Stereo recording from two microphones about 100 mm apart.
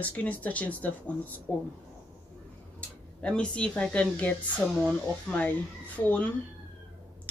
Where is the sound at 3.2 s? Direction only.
10° left (ahead or behind).